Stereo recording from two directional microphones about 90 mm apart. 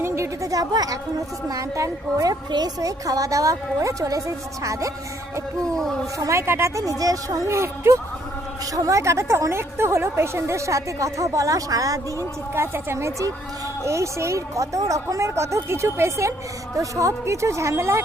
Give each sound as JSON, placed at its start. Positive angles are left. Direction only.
{"t": 0.0, "sound": "a sound", "side_deg": -35}
{"t": 1.5, "sound": "a woman's voice", "side_deg": -35}
{"t": 6.1, "sound": "a woman's voice", "side_deg": -35}
{"t": 12.5, "sound": "a woman's voice", "side_deg": -30}